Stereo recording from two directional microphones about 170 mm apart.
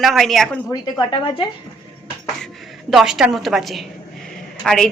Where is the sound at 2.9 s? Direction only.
Centre (ahead or behind).